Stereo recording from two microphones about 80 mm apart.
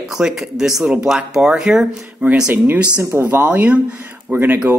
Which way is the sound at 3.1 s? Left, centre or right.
Right.